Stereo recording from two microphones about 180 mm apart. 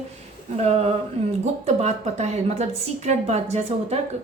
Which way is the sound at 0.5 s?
35° right (ahead or behind).